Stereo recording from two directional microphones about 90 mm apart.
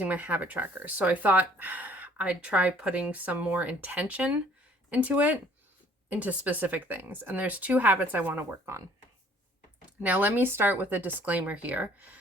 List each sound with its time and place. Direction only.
0.0 s speech: 15° right (ahead or behind)
10.0 s speech: 20° right (ahead or behind)